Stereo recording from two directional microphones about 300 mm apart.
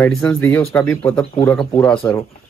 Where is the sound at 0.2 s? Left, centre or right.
Centre.